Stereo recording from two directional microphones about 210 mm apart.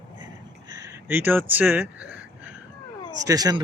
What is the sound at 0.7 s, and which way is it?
Speech, 10° right (ahead or behind).